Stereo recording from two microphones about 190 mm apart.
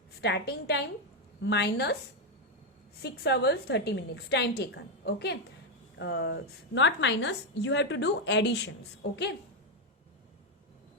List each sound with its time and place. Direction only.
0.2 s a woman's voice: 65° left (ahead or behind)
3.0 s a woman's voice: 60° left (ahead or behind)